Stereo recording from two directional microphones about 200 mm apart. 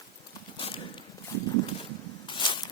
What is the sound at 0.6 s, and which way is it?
Clip-clop, 25° left (ahead or behind).